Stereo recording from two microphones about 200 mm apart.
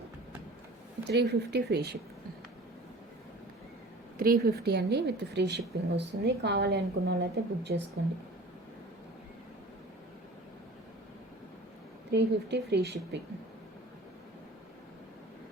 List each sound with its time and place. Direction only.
1.0 s a woman's voice: 55° right (ahead or behind)
4.2 s a woman's voice: 50° right (ahead or behind)
12.1 s a woman's voice: 55° right (ahead or behind)